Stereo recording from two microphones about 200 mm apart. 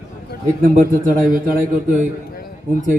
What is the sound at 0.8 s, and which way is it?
A man's voice, 45° right (ahead or behind).